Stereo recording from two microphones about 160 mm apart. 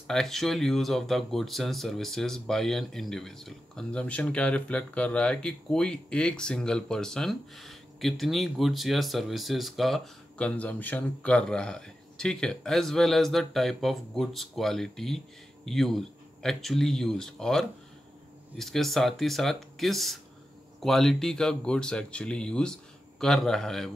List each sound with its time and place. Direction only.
0.0 s speech: centre (ahead or behind)